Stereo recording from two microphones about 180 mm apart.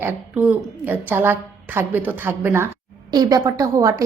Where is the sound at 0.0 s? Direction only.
10° right (ahead or behind).